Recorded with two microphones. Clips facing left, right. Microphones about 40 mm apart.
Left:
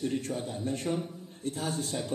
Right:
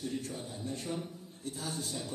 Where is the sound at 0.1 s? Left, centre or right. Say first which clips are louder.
Left 6 dB; left.